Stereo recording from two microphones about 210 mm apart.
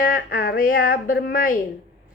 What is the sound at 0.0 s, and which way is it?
A woman's voice, 45° left (ahead or behind).